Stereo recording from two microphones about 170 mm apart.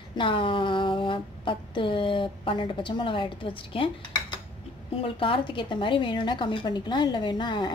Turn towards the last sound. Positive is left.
turn(degrees=25)  # may be behind; listen again after turning